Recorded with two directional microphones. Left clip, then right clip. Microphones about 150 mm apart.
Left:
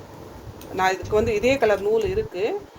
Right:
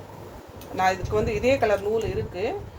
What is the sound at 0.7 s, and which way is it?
Speech, 65° left (ahead or behind).